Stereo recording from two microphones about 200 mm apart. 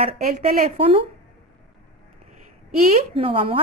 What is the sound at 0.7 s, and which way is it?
Speech, 25° right (ahead or behind).